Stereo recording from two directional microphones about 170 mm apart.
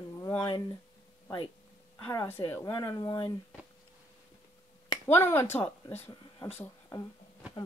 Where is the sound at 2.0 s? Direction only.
15° left (ahead or behind).